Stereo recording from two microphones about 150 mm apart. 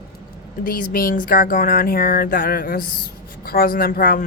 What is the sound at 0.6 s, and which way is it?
Speech, 70° left (ahead or behind).